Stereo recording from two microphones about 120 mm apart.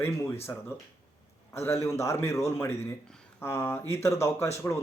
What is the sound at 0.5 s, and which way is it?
Speech, 25° left (ahead or behind).